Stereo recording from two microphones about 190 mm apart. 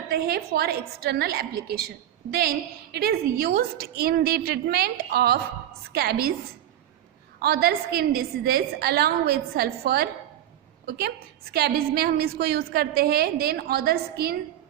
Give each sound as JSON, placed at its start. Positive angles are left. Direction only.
{"t": 0.1, "sound": "a woman's voice", "side_deg": -55}
{"t": 7.3, "sound": "a woman's voice", "side_deg": -55}